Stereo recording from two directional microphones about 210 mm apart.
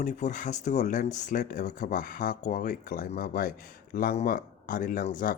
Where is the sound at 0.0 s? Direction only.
35° left (ahead or behind).